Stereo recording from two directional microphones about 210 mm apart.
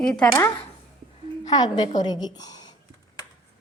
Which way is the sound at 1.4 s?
20° left (ahead or behind).